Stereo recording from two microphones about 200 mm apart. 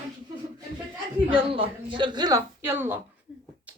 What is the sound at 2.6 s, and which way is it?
Speech, 10° right (ahead or behind).